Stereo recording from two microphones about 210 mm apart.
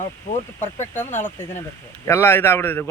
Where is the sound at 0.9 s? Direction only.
10° left (ahead or behind).